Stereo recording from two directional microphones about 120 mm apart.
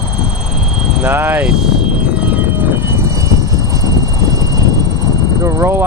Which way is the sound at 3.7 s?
30° right (ahead or behind).